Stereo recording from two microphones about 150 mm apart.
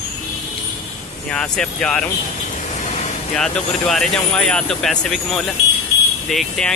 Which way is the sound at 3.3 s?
5° left (ahead or behind).